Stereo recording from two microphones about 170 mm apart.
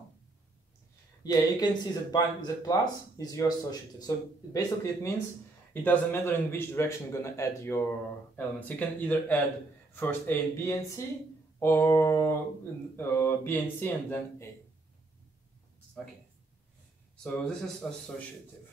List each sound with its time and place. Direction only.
1.2 s a man's voice: 20° left (ahead or behind)
17.2 s speech: 5° left (ahead or behind)